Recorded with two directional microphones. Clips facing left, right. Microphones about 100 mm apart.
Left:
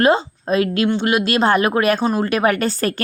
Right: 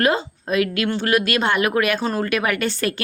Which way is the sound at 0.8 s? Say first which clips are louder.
Left 2 dB; 20° left (ahead or behind).